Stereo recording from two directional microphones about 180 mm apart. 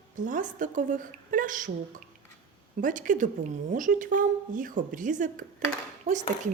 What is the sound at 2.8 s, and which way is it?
A woman's voice, 45° right (ahead or behind).